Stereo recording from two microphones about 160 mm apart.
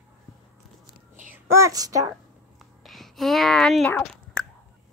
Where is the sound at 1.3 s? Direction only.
15° right (ahead or behind).